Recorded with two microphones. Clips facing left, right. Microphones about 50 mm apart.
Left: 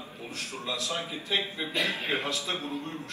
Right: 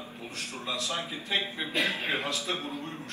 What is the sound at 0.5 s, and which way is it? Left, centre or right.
A man's voice, right.